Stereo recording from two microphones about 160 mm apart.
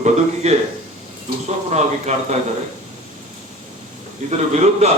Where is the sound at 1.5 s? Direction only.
45° right (ahead or behind).